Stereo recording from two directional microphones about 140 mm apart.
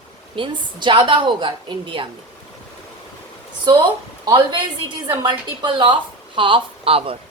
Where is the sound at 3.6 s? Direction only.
30° right (ahead or behind).